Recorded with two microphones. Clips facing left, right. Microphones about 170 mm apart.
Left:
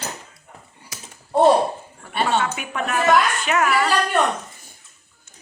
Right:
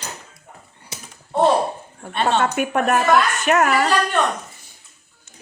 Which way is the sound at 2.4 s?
50° right (ahead or behind).